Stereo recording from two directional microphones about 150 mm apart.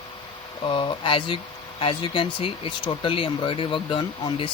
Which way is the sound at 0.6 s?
35° left (ahead or behind).